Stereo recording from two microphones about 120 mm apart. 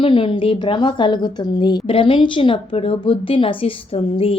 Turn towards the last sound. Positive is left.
turn(degrees=55)  # may be behind; listen again after turning